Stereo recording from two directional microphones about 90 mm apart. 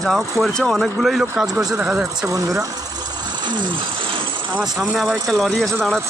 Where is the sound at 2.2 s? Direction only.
40° right (ahead or behind); by 4.3 s 70° right (ahead or behind).